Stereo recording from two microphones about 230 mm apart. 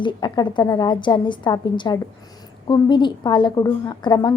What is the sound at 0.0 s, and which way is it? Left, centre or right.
A woman's voice, centre.